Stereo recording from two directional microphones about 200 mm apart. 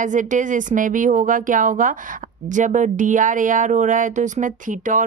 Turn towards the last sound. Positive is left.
turn(degrees=-40)  # may be behind; listen again after turning